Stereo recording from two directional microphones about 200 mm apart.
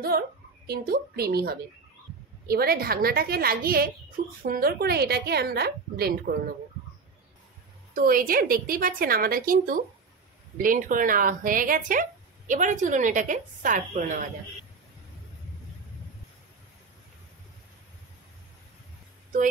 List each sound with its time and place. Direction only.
0.1 s a woman's voice: 50° right (ahead or behind)
7.9 s a woman's voice: 45° right (ahead or behind)